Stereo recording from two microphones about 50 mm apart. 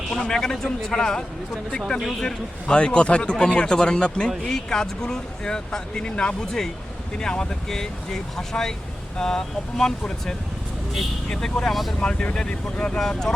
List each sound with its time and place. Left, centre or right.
0.1 s speech: centre
2.2 s speech: centre
11.7 s speech: centre
11.9 s speech: centre